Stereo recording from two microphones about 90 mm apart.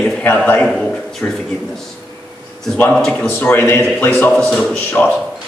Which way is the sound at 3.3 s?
25° left (ahead or behind).